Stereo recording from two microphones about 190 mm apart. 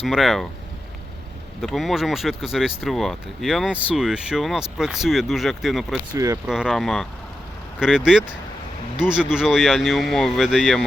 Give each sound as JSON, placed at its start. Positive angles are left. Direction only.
{"t": 0.0, "sound": "speech", "side_deg": 0}
{"t": 1.6, "sound": "speech", "side_deg": 0}
{"t": 6.1, "sound": "speech", "side_deg": -15}
{"t": 6.4, "sound": "speech", "side_deg": -5}